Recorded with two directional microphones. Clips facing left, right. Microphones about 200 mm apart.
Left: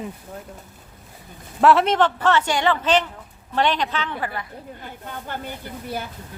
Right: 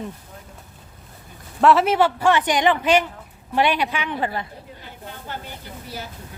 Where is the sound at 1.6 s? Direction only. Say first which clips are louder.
Even; centre (ahead or behind).